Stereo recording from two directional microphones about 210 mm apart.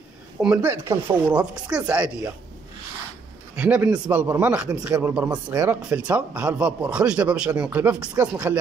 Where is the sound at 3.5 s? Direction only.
5° right (ahead or behind).